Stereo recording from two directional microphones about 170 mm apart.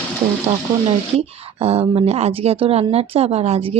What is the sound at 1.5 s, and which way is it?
Speech, 35° right (ahead or behind).